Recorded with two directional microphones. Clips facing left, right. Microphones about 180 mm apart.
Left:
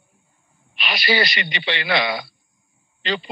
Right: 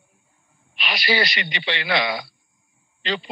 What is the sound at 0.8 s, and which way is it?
A man's voice, 65° left (ahead or behind).